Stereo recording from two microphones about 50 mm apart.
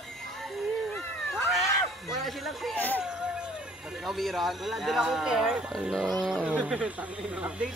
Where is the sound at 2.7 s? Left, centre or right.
Left.